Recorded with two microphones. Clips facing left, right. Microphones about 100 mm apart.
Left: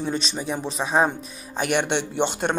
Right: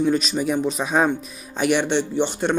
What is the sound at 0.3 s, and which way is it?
Speech, 30° left (ahead or behind).